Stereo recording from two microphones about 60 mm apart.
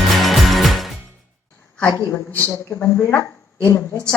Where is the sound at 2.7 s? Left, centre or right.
Left.